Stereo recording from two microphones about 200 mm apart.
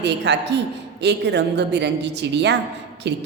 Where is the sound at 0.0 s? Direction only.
60° right (ahead or behind).